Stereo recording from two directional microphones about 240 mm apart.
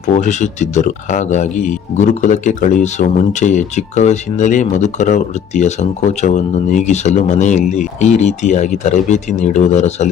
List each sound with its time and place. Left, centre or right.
0.2 s speech: left